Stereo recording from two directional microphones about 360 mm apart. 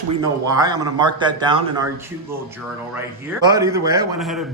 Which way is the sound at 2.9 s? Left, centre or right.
Centre.